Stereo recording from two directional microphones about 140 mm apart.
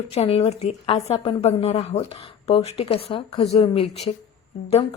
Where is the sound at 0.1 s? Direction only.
45° left (ahead or behind).